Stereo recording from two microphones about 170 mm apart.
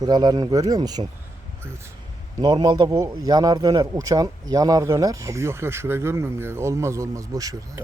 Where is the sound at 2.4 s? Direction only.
25° right (ahead or behind).